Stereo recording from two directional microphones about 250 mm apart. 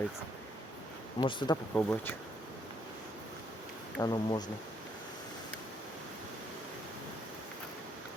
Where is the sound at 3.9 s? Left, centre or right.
Centre.